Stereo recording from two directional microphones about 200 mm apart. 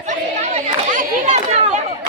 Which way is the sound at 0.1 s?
40° right (ahead or behind).